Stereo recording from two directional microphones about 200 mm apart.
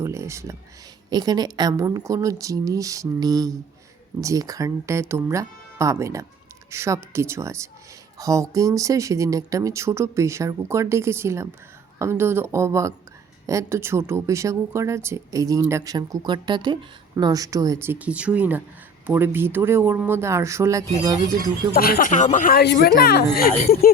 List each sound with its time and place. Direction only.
0.0 s speech: 15° right (ahead or behind)
21.7 s speech: 50° left (ahead or behind)